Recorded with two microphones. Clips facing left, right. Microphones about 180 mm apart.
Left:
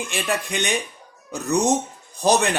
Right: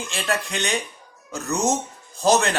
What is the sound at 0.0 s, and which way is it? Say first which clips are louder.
A man's voice: left 1 dB; 15° left (ahead or behind).